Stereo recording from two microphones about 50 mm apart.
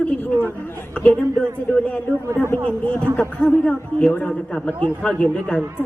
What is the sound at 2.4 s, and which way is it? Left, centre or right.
Speech, right.